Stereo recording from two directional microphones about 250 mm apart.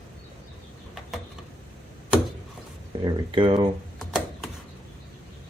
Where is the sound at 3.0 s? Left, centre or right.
Centre.